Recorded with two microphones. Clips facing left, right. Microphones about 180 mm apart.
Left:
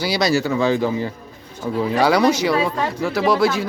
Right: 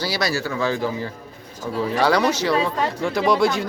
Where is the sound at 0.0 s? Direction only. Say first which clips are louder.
Left 5 dB; 20° left (ahead or behind).